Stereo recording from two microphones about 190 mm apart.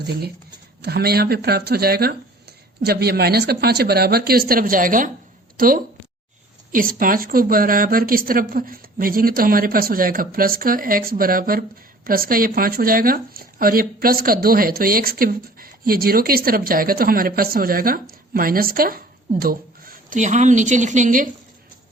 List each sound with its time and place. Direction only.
0.0 s speech: 55° right (ahead or behind)